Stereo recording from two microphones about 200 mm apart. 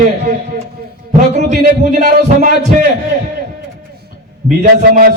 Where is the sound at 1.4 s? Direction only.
45° right (ahead or behind).